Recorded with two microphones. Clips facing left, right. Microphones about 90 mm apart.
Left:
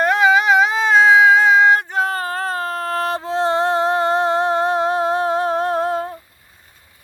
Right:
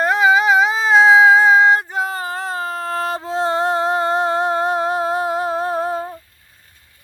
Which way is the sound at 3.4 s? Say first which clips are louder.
Left 1 dB; 30° left (ahead or behind).